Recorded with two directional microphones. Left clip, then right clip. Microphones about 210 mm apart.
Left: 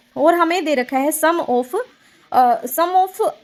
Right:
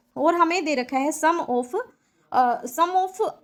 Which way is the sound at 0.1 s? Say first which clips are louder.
Left 5 dB; 35° left (ahead or behind).